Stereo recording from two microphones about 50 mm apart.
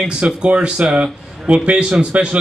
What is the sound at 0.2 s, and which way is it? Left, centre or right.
A man's voice, right.